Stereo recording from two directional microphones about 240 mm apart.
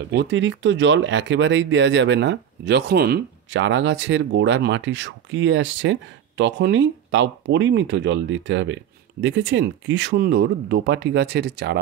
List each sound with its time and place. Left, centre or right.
0.1 s speech: right